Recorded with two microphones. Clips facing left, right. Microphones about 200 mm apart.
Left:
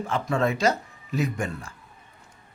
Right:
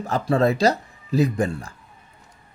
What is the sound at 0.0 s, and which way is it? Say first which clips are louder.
Speech: right 5 dB; 35° right (ahead or behind).